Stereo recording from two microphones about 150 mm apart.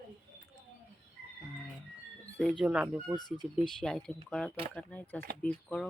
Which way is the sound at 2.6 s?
5° right (ahead or behind).